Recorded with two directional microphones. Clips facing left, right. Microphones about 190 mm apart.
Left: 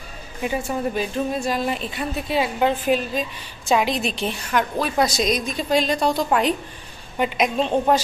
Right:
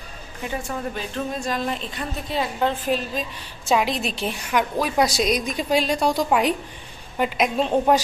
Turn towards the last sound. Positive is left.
turn(degrees=-5)  # may be behind; listen again after turning